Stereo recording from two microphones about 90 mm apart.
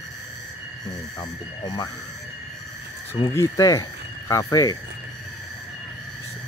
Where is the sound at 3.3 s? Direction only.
35° left (ahead or behind).